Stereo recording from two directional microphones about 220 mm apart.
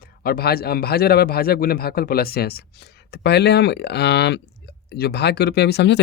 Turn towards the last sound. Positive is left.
turn(degrees=50)  # may be behind; listen again after turning